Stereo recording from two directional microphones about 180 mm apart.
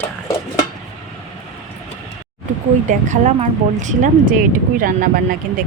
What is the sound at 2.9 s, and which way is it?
Speech, 45° right (ahead or behind).